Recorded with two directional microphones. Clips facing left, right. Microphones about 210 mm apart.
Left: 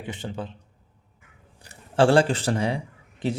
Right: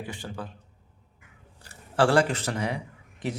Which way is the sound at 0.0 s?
20° left (ahead or behind).